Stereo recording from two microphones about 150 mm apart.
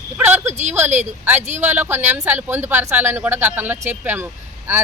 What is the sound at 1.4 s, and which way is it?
Speech, 50° right (ahead or behind).